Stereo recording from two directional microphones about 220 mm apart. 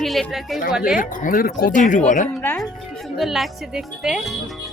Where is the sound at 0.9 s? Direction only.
40° left (ahead or behind).